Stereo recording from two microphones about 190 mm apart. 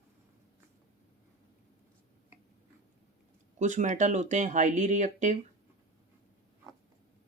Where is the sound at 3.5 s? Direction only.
40° right (ahead or behind).